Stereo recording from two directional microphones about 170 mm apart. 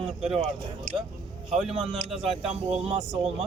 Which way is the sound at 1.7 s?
35° right (ahead or behind).